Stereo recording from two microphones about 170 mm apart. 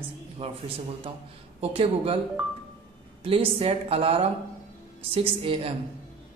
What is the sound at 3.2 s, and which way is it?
A man's voice, 35° right (ahead or behind).